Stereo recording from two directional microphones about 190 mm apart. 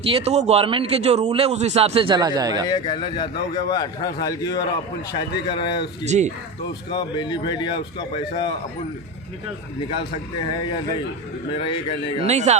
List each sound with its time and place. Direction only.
0.0 s a man's voice: 30° right (ahead or behind)
2.6 s a man's voice: 20° left (ahead or behind)
6.1 s a man's voice: 35° right (ahead or behind)
6.9 s a man's voice: 25° left (ahead or behind)
11.5 s a man's voice: 30° left (ahead or behind)
12.2 s a man's voice: 35° right (ahead or behind)